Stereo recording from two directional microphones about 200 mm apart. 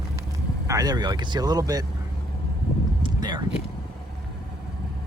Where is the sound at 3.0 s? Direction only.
20° right (ahead or behind).